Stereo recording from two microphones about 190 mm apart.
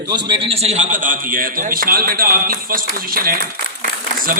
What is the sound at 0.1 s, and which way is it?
A man's voice, 25° right (ahead or behind).